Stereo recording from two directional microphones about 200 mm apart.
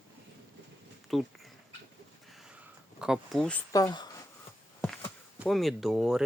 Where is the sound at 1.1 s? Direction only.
Centre (ahead or behind).